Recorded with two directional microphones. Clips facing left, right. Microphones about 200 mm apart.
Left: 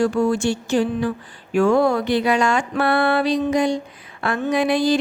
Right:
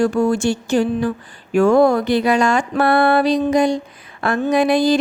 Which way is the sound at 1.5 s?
45° right (ahead or behind).